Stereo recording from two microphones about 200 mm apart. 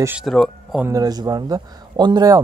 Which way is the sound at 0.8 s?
20° right (ahead or behind).